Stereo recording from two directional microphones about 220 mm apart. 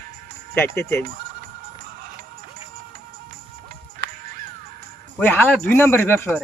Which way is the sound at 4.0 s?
40° right (ahead or behind).